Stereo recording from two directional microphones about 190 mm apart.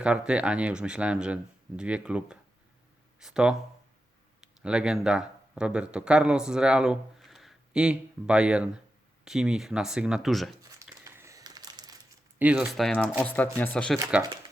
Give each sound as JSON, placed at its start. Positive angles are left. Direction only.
{"t": 0.0, "sound": "speech", "side_deg": -5}
{"t": 10.6, "sound": "crumpling", "side_deg": -15}
{"t": 12.4, "sound": "speech", "side_deg": -5}